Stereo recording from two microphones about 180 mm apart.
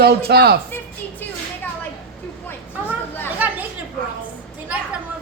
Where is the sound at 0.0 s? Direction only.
60° right (ahead or behind).